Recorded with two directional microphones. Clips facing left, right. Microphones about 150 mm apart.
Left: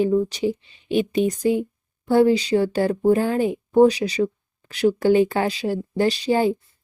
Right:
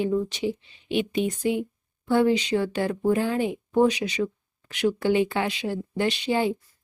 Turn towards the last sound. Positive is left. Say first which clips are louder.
# left 5 dB
turn(degrees=40)  # may be behind; listen again after turning